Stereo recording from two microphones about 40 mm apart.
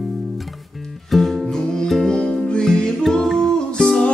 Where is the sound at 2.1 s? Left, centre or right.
Left.